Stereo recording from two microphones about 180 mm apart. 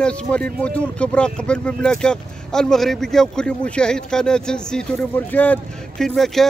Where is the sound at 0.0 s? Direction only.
5° left (ahead or behind).